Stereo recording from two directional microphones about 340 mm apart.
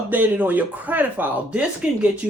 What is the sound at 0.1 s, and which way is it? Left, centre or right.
Speech, centre.